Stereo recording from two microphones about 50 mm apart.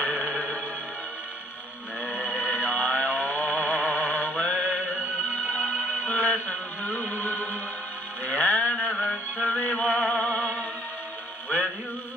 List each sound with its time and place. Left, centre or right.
0.2 s music: centre
2.2 s music: left
4.4 s mantra: left
5.6 s music: left
8.3 s mantra: left
9.1 s music: left
9.6 s music: left